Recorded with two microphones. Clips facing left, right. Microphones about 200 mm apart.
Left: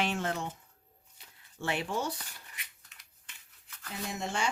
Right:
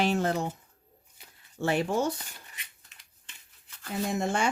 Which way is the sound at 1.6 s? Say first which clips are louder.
Right 7 dB; 40° right (ahead or behind).